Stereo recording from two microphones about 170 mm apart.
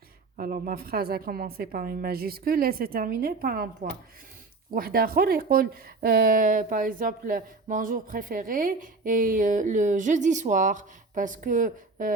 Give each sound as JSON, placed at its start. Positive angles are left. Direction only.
{"t": 0.3, "sound": "a woman's voice", "side_deg": -55}
{"t": 4.7, "sound": "speech", "side_deg": -60}